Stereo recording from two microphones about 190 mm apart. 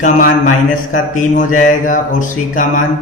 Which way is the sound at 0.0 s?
45° left (ahead or behind).